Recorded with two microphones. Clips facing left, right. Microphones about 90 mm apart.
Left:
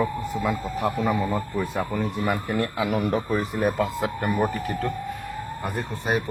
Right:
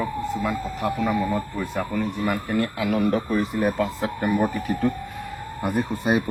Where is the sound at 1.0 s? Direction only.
25° left (ahead or behind).